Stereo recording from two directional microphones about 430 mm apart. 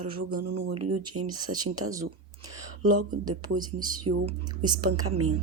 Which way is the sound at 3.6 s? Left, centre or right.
Centre.